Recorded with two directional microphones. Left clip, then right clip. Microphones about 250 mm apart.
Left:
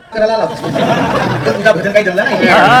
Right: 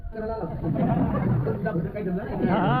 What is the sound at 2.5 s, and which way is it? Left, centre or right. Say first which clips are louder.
Speech: left 18 dB; centre.